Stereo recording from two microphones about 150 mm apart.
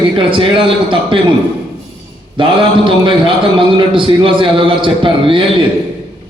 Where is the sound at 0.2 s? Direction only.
35° right (ahead or behind).